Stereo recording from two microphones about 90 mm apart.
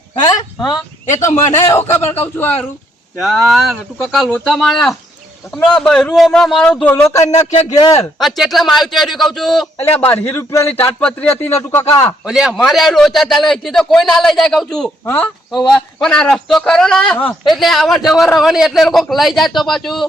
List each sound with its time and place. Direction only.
1.1 s a man's voice: 35° left (ahead or behind)
3.2 s a man's voice: centre (ahead or behind)
6.8 s a man's voice: 25° left (ahead or behind); by 8.0 s 45° left (ahead or behind)
8.2 s a man's voice: centre (ahead or behind)
9.9 s a man's voice: 20° left (ahead or behind)
10.3 s a man's voice: 30° left (ahead or behind)
11.0 s a man's voice: 20° left (ahead or behind)
12.2 s a man's voice: 5° right (ahead or behind)
15.0 s a man's voice: 20° left (ahead or behind)
15.5 s a man's voice: centre (ahead or behind)